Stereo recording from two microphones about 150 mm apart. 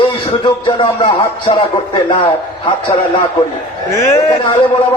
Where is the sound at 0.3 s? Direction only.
35° left (ahead or behind).